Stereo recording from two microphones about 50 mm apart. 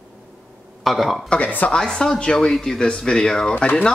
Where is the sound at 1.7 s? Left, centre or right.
Centre.